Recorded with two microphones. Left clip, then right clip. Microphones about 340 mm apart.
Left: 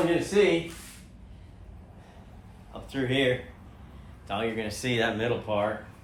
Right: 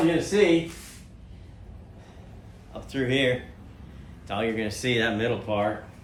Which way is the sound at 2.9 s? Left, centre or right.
Centre.